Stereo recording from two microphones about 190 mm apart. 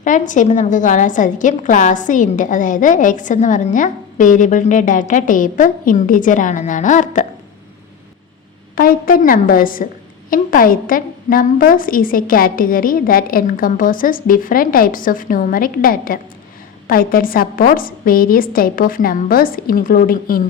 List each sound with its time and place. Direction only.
0.0 s a woman's voice: 40° left (ahead or behind)
8.7 s a woman's voice: 50° left (ahead or behind)